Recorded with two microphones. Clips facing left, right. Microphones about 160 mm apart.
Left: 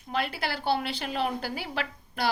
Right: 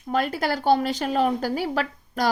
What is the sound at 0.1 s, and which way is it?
Speech, 45° right (ahead or behind).